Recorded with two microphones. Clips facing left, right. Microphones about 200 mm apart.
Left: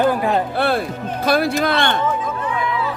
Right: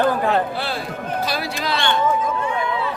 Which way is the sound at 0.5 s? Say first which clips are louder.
Left 7 dB; 55° left (ahead or behind).